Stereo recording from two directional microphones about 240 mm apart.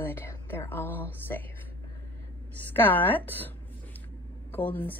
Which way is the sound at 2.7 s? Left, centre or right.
Centre.